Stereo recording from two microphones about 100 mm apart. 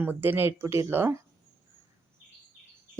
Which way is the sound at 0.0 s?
20° right (ahead or behind).